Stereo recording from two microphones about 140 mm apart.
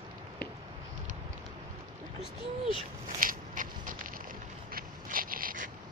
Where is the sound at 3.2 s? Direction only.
70° right (ahead or behind).